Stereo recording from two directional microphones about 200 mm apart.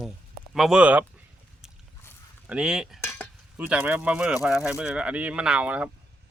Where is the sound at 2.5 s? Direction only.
5° right (ahead or behind).